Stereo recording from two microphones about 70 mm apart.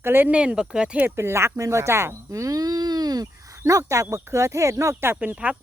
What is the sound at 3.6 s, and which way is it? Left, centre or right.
Speech, right.